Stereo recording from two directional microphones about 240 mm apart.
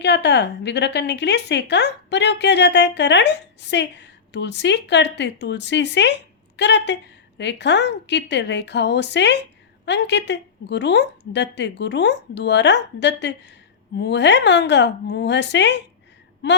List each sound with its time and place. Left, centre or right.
0.0 s a woman's voice: left